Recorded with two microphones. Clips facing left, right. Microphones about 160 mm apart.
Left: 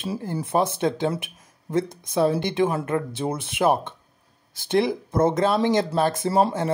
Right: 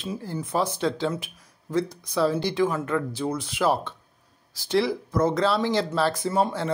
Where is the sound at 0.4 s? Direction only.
25° left (ahead or behind).